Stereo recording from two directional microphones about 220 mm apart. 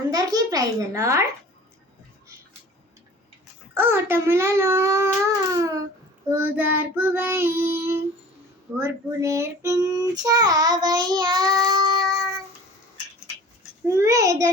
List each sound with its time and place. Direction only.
0.1 s child singing: 15° right (ahead or behind)
3.8 s child singing: 10° right (ahead or behind)
13.8 s child singing: 15° right (ahead or behind)